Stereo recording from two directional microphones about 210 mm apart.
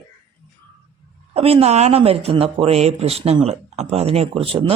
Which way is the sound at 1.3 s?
30° right (ahead or behind).